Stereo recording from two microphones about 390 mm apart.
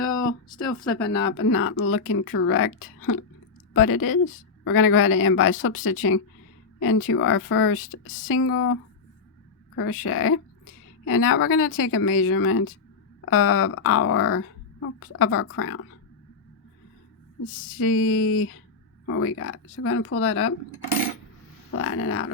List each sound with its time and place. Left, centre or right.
0.9 s speech: left
17.4 s speech: left
21.7 s speech: left